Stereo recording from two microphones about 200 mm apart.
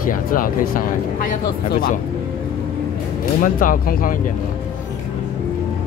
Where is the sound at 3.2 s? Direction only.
45° left (ahead or behind).